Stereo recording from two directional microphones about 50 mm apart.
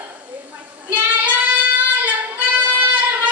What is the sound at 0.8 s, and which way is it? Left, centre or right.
Child singing, right.